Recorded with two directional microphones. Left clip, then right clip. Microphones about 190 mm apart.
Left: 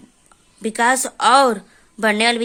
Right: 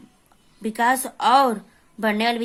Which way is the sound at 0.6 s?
15° left (ahead or behind).